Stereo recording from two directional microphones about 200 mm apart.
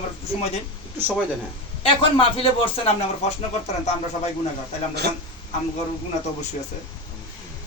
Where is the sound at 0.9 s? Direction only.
10° right (ahead or behind).